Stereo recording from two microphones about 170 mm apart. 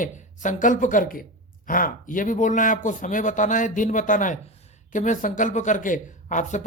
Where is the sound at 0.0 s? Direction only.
50° left (ahead or behind).